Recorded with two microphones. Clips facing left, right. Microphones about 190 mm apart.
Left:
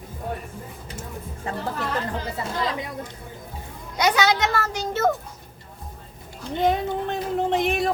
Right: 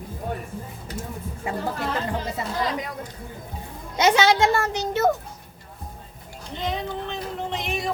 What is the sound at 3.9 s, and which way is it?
A child's voice, 25° right (ahead or behind).